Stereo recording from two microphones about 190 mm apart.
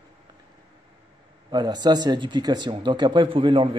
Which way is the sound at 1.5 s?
20° right (ahead or behind).